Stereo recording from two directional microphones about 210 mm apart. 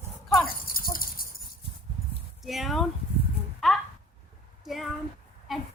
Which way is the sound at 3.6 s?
Centre (ahead or behind).